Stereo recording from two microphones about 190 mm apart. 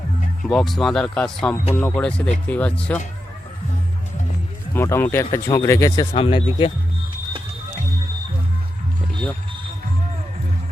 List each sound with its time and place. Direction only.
0.4 s speech: centre (ahead or behind)
4.7 s speech: 10° left (ahead or behind)
6.1 s speech: 30° left (ahead or behind)